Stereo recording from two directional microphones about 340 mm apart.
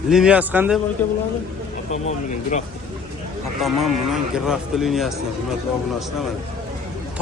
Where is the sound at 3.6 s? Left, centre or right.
Centre.